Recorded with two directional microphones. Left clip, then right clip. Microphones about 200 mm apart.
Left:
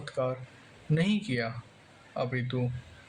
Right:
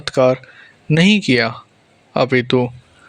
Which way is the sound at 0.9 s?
45° right (ahead or behind).